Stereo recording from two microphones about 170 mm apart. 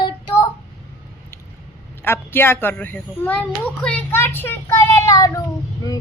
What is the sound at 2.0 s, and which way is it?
A child's voice, 15° left (ahead or behind).